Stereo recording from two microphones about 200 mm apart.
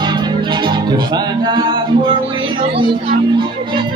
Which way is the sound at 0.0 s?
20° right (ahead or behind).